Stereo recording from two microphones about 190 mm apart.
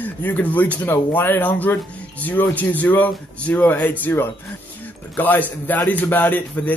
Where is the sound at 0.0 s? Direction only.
10° left (ahead or behind).